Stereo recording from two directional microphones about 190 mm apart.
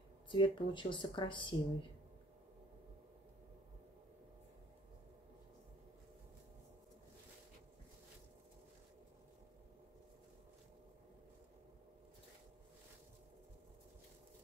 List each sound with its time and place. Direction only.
0.3 s speech: 25° left (ahead or behind)